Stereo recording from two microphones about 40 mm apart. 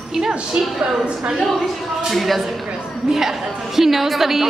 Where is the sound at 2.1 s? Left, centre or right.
Centre.